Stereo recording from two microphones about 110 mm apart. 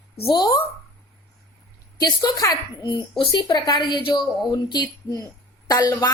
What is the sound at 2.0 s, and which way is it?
A woman's voice, 40° left (ahead or behind).